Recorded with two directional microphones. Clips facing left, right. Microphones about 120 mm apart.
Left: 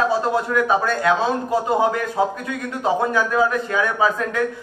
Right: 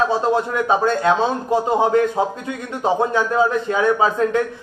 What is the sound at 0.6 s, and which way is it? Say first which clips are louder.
Speech: right 1 dB; 25° right (ahead or behind).